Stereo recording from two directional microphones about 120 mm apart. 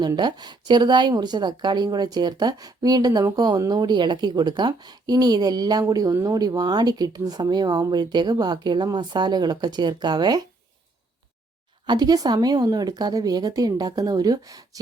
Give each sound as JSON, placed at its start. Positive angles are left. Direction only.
{"t": 0.2, "sound": "speech", "side_deg": -35}
{"t": 11.9, "sound": "speech", "side_deg": -35}